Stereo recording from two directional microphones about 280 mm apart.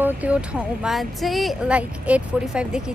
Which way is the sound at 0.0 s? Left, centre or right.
Centre.